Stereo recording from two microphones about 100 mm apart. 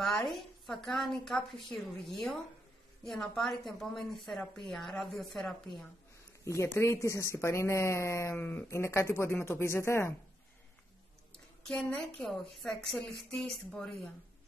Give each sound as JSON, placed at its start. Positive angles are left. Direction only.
{"t": 0.0, "sound": "a woman's voice", "side_deg": 5}
{"t": 6.4, "sound": "speech", "side_deg": 30}
{"t": 11.6, "sound": "a woman's voice", "side_deg": 5}